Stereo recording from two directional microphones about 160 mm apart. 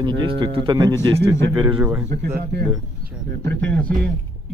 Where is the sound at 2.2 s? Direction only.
80° right.